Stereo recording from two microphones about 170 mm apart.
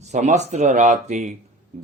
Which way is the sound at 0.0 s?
45° right (ahead or behind).